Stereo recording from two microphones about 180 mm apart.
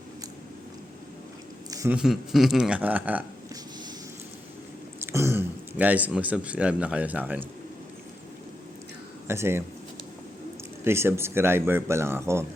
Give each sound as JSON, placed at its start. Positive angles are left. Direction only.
{"t": 1.7, "sound": "a sound", "side_deg": -15}
{"t": 2.0, "sound": "speech", "side_deg": 0}
{"t": 4.9, "sound": "speech", "side_deg": -15}
{"t": 9.2, "sound": "a man's voice", "side_deg": -15}
{"t": 10.8, "sound": "a man's voice", "side_deg": -15}